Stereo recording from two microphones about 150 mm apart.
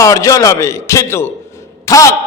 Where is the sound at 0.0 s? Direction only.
20° left (ahead or behind).